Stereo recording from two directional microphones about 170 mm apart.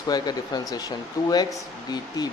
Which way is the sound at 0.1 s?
25° left (ahead or behind).